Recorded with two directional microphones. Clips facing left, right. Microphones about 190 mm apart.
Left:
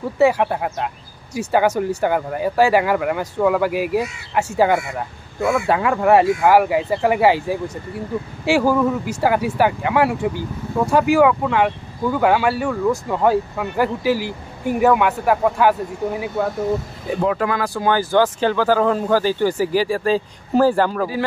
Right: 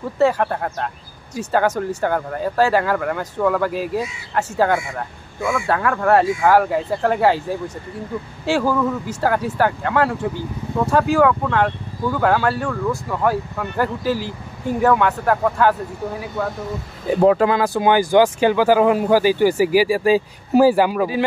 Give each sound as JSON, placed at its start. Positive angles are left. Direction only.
{"t": 0.2, "sound": "speech", "side_deg": 10}
{"t": 5.7, "sound": "speech", "side_deg": 15}
{"t": 17.2, "sound": "speech", "side_deg": -30}